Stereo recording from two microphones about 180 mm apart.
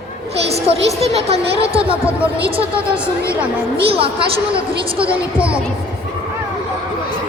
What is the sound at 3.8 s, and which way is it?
Speech, 30° right (ahead or behind).